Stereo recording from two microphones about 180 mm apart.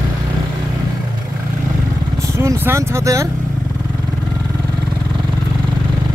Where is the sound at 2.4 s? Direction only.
15° right (ahead or behind).